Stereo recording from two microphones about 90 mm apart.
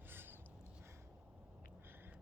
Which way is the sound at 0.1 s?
25° right (ahead or behind).